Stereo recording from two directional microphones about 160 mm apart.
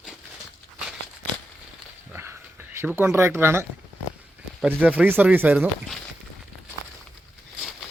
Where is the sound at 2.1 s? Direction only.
15° right (ahead or behind).